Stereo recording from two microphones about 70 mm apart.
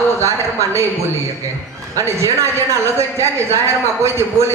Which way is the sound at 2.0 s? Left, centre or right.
Right.